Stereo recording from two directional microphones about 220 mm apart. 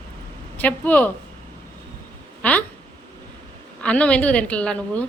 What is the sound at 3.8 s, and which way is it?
A woman's voice, 5° left (ahead or behind).